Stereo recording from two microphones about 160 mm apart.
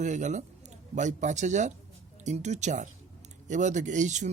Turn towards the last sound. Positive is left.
turn(degrees=-50)  # may be behind; listen again after turning